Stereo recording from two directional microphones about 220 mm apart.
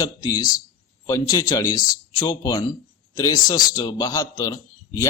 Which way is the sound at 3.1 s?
15° left (ahead or behind).